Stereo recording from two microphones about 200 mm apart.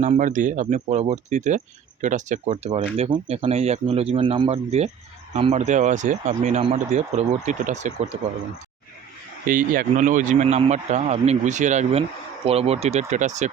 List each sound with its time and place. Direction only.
0.0 s speech: 40° right (ahead or behind)
9.5 s speech: 40° right (ahead or behind)